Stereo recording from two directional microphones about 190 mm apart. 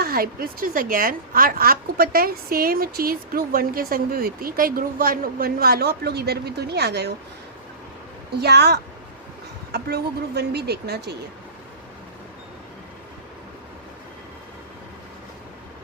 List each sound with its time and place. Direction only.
0.0 s speech: 50° right (ahead or behind)
8.4 s speech: 60° right (ahead or behind)